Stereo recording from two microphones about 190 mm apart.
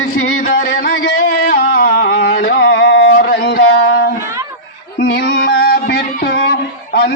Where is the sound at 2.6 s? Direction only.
80° left.